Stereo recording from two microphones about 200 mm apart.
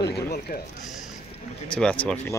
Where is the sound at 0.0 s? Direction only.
50° left (ahead or behind).